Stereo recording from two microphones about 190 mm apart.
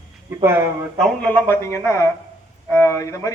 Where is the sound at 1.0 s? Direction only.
5° left (ahead or behind).